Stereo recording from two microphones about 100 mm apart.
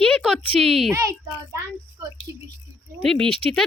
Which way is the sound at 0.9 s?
30° right (ahead or behind).